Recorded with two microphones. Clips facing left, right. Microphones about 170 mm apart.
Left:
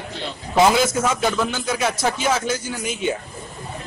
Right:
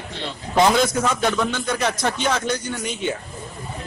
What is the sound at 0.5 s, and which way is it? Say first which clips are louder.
A man's voice: left 1 dB; 5° left (ahead or behind).